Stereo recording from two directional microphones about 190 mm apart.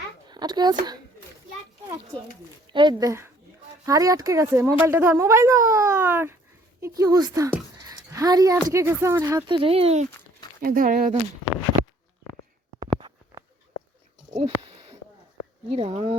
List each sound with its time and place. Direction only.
0.3 s speech: 20° right (ahead or behind)
2.7 s a woman's voice: 20° right (ahead or behind)
10.6 s speech: 50° right (ahead or behind)
13.0 s a sound: 25° right (ahead or behind)
15.7 s speech: 30° right (ahead or behind)